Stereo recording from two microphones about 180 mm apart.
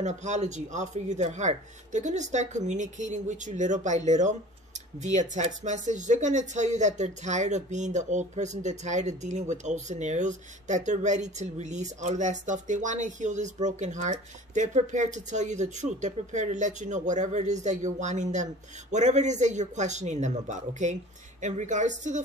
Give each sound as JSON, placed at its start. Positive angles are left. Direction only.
{"t": 0.0, "sound": "a woman's voice", "side_deg": -40}